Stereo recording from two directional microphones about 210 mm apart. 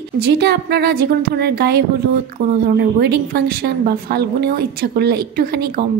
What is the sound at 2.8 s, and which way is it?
A woman's voice, 50° right (ahead or behind).